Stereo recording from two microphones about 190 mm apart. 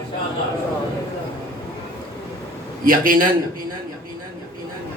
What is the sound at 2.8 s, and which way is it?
Speech, 50° right (ahead or behind).